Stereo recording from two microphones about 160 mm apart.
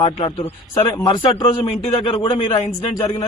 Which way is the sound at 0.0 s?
35° left (ahead or behind).